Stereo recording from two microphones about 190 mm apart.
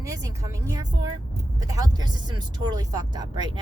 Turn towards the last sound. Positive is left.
turn(degrees=-25)  # may be behind; listen again after turning